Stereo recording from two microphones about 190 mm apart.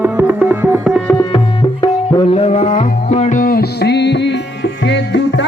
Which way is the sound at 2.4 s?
35° left (ahead or behind).